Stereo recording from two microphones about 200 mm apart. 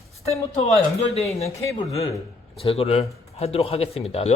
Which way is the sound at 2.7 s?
30° left (ahead or behind).